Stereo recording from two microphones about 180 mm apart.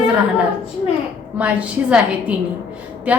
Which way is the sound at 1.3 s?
10° right (ahead or behind).